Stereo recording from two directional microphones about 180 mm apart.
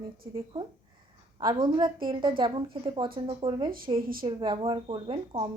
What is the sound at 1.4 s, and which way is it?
Speech, 25° right (ahead or behind).